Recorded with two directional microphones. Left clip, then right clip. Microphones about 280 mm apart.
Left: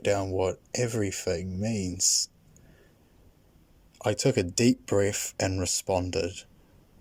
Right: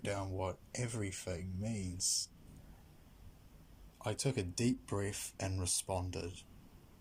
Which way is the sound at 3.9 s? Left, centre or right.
Left.